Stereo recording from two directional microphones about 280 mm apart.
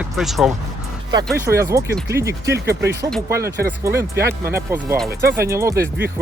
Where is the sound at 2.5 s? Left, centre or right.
Right.